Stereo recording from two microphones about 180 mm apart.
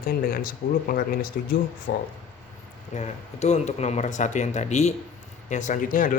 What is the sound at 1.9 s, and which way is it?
Speech, 70° left (ahead or behind).